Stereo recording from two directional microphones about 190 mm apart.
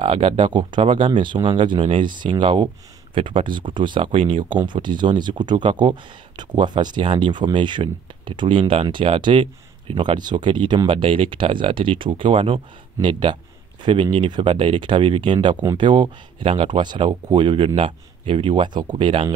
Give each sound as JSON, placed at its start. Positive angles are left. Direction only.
{"t": 0.0, "sound": "speech", "side_deg": -30}